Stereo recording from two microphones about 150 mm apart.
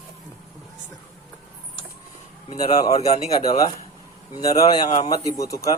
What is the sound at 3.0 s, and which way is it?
Speech, 45° left (ahead or behind).